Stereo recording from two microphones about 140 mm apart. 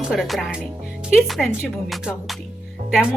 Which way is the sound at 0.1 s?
Centre (ahead or behind).